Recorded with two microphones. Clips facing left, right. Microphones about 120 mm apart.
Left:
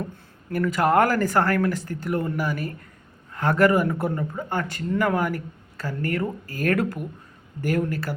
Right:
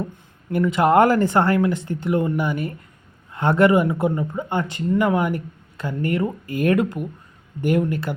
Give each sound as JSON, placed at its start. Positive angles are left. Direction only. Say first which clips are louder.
{"t": 0.5, "sound": "speech", "louder": "right 4 dB", "side_deg": -25}